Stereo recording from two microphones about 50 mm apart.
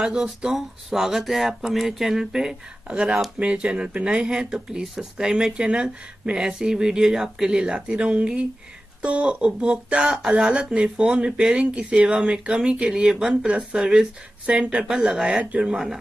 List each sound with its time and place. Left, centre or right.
0.0 s speech: centre
0.6 s a sound: centre
1.5 s speech: centre
13.5 s speech: right
13.7 s speech: centre
14.5 s speech: right
15.0 s speech: centre
15.6 s a sound: centre